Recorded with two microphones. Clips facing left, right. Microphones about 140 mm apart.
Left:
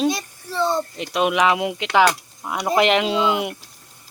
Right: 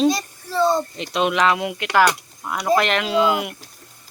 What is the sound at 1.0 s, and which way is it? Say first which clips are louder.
Speech: left 1 dB; 5° left (ahead or behind).